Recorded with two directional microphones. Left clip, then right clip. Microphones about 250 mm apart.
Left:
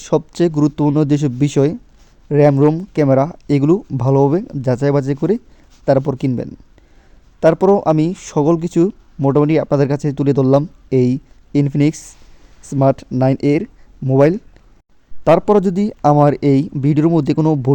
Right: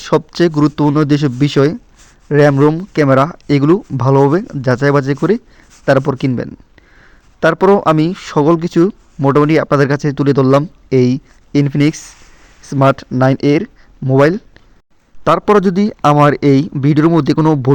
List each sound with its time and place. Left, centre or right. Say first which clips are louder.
0.0 s speech: right 3 dB; centre
17.3 s a man's voice: right 3 dB; centre